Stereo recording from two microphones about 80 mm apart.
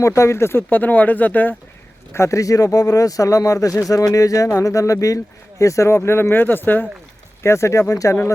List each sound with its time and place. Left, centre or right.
0.2 s speech: left
2.1 s speech: left
7.4 s speech: left